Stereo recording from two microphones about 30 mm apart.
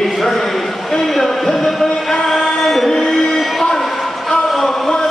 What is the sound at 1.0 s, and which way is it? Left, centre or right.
Speech, centre.